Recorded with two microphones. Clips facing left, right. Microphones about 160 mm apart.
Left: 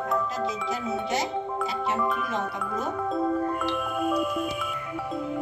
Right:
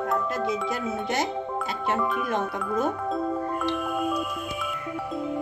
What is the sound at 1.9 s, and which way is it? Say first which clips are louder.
Speech: right 4 dB; 55° right (ahead or behind).